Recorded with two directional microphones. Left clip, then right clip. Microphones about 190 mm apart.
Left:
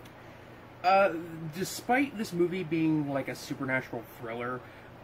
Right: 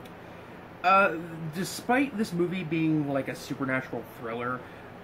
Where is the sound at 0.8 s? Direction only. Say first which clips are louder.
Right 2 dB; 15° right (ahead or behind).